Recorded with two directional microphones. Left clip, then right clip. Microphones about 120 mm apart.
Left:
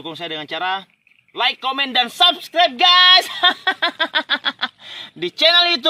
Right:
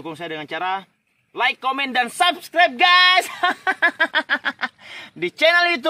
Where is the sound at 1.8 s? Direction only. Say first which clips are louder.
Left 3 dB; centre (ahead or behind).